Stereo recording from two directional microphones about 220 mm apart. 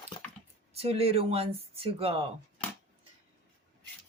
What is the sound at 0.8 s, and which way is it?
Speech, 25° right (ahead or behind).